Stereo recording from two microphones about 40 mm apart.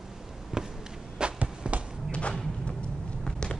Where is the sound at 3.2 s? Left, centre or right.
Centre.